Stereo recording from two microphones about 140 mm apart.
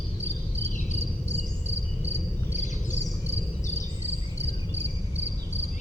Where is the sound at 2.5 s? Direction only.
60° left (ahead or behind).